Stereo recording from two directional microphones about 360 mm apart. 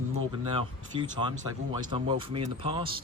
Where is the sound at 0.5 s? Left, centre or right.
Centre.